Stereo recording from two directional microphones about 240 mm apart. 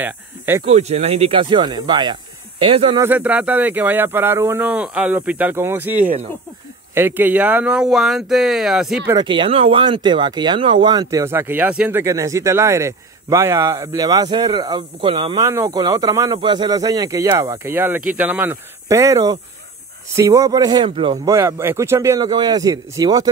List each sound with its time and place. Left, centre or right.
0.7 s speech: right
3.0 s speech: centre
9.1 s speech: centre
21.3 s speech: centre